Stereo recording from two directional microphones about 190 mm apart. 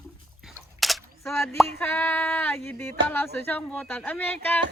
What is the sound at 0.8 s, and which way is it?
Single-lens reflex camera, centre (ahead or behind).